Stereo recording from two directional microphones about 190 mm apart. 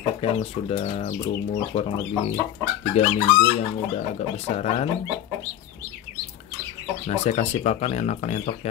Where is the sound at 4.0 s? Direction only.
35° left (ahead or behind).